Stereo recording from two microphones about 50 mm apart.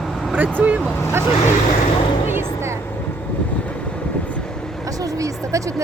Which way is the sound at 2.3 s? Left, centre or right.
Right.